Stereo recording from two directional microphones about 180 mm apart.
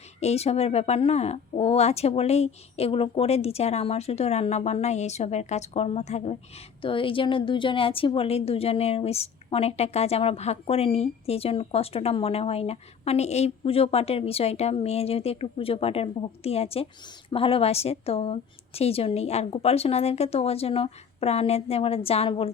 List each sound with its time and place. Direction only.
0.2 s a woman's voice: 35° left (ahead or behind)